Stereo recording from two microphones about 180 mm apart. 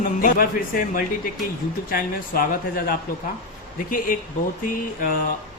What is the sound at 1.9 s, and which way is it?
Speech, 55° left (ahead or behind).